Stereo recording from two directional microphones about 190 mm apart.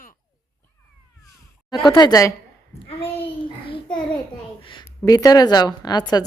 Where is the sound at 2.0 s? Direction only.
20° left (ahead or behind).